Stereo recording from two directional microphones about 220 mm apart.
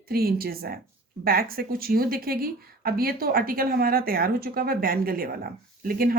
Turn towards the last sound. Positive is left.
turn(degrees=-40)  # may be behind; listen again after turning